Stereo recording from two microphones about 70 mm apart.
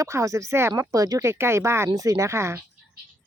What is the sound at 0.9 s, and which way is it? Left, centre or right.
Speech, right.